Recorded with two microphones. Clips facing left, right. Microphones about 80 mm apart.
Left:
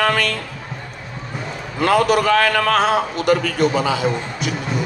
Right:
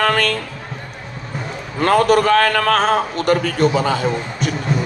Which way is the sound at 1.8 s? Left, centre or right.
Right.